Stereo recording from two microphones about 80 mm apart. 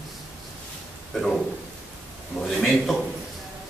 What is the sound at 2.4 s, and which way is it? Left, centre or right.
Speech, centre.